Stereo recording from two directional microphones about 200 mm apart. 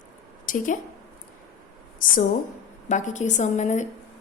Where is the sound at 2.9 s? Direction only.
35° left (ahead or behind).